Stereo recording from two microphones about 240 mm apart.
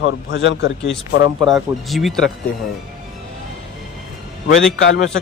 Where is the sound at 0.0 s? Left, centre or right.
Left.